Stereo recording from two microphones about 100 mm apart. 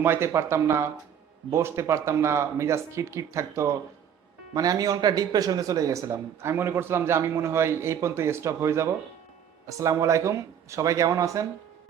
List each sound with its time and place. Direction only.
0.0 s a man's voice: 25° right (ahead or behind)